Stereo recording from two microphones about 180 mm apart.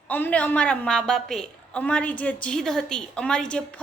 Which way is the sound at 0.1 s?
10° left (ahead or behind).